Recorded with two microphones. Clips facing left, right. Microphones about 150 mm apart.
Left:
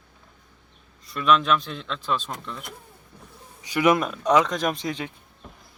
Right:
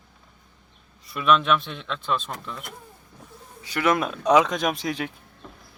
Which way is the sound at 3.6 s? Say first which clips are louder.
Left 3 dB; 15° left (ahead or behind).